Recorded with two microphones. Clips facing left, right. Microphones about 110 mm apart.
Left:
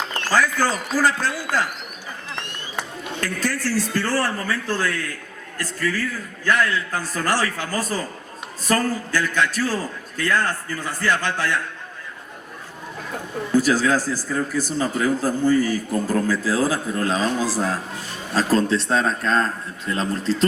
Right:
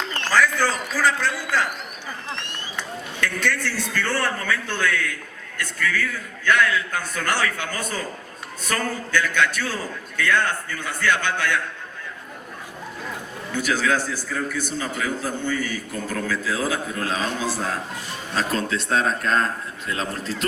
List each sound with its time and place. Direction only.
0.3 s a man's voice: 40° left (ahead or behind)
3.4 s a man's voice: 35° left (ahead or behind)
13.5 s a man's voice: 35° left (ahead or behind)